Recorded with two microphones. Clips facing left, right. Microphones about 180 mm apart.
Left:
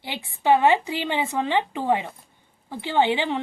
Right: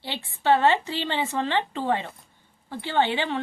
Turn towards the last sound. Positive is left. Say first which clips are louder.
# left 3 dB
turn(degrees=15)  # may be behind; listen again after turning